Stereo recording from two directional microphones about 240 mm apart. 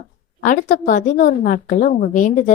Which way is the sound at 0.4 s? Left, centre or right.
Left.